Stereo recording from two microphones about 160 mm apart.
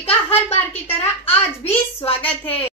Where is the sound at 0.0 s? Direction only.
40° left (ahead or behind).